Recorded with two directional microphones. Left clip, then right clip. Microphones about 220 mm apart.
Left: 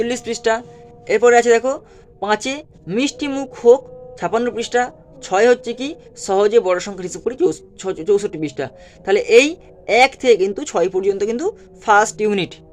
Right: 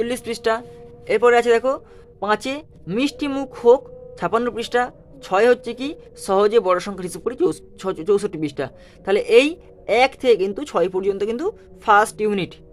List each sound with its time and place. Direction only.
0.0 s speech: centre (ahead or behind)